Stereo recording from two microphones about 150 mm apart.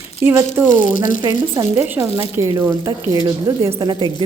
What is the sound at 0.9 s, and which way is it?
Speech, 60° left (ahead or behind).